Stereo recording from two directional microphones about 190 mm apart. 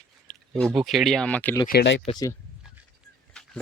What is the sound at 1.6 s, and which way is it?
Speech, 60° left (ahead or behind).